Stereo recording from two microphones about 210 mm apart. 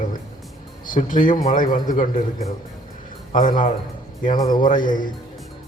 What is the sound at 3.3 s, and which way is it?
A man's voice, 40° left (ahead or behind).